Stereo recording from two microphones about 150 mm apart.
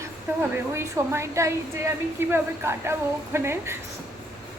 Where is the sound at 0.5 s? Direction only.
15° right (ahead or behind).